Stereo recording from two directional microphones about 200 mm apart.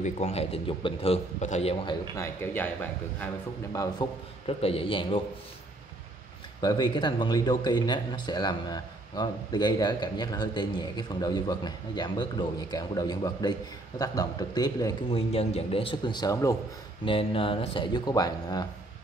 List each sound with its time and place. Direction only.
0.0 s a man's voice: 30° left (ahead or behind)
2.1 s a man's voice: 15° left (ahead or behind)
4.0 s speech: 20° left (ahead or behind)
6.6 s speech: 20° left (ahead or behind)
17.0 s speech: 25° left (ahead or behind)